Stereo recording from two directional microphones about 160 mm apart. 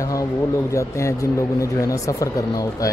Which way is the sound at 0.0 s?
20° left (ahead or behind).